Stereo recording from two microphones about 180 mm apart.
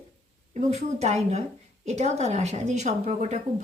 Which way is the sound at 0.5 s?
40° right (ahead or behind).